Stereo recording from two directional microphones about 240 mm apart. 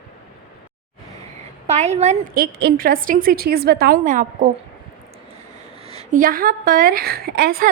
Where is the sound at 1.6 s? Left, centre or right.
Right.